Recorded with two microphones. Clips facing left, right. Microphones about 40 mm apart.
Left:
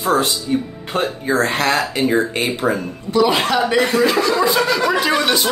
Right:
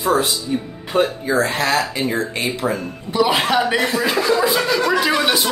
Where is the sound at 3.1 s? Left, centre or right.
Centre.